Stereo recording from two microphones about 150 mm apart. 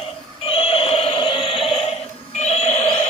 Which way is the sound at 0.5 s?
40° left (ahead or behind).